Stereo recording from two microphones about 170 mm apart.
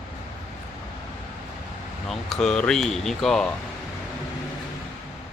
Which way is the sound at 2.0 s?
Centre (ahead or behind).